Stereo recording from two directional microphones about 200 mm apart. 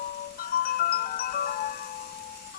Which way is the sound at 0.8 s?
50° left (ahead or behind).